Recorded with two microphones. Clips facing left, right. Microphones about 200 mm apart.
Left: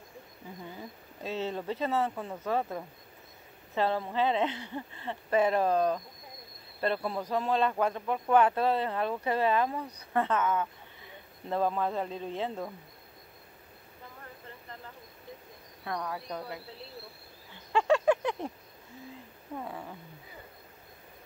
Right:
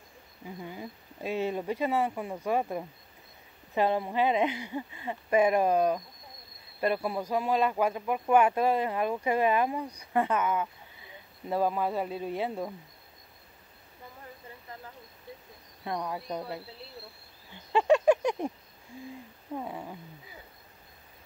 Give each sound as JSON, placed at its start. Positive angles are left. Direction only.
{"t": 0.7, "sound": "speech", "side_deg": -10}
{"t": 15.8, "sound": "speech", "side_deg": -20}
{"t": 17.7, "sound": "a sound", "side_deg": -20}
{"t": 19.6, "sound": "speech", "side_deg": -15}